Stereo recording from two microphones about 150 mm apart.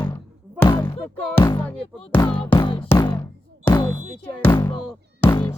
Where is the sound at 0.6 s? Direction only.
15° left (ahead or behind).